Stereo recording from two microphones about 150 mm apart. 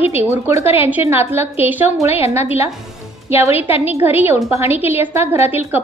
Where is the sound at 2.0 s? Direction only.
40° left (ahead or behind).